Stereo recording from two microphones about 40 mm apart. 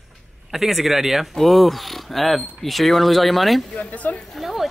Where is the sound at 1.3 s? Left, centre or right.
Centre.